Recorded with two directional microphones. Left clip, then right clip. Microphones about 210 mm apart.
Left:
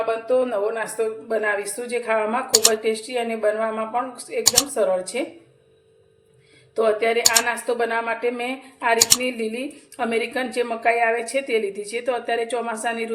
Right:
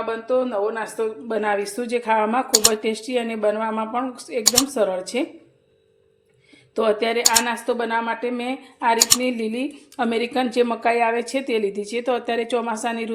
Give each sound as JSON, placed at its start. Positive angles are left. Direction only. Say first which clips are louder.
{"t": 0.1, "sound": "a woman's voice", "louder": "even", "side_deg": -15}
{"t": 2.5, "sound": "speech", "louder": "even", "side_deg": 0}
{"t": 2.8, "sound": "a woman's voice", "louder": "even", "side_deg": -40}
{"t": 4.4, "sound": "speech", "louder": "right 1 dB", "side_deg": 0}
{"t": 4.7, "sound": "a woman's voice", "louder": "even", "side_deg": -40}
{"t": 6.7, "sound": "a woman's voice", "louder": "left 1 dB", "side_deg": -40}
{"t": 7.4, "sound": "speech", "louder": "left 1 dB", "side_deg": -25}
{"t": 9.0, "sound": "speech", "louder": "even", "side_deg": 0}
{"t": 9.4, "sound": "a woman's voice", "louder": "right 1 dB", "side_deg": -30}